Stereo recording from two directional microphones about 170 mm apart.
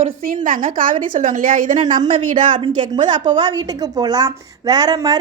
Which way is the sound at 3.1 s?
25° right (ahead or behind).